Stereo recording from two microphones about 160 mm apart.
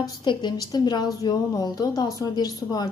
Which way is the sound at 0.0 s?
30° left (ahead or behind).